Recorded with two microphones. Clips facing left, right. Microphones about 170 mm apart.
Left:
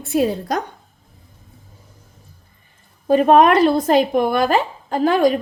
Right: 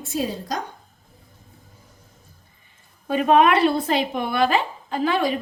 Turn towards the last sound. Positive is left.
turn(degrees=45)  # may be behind; listen again after turning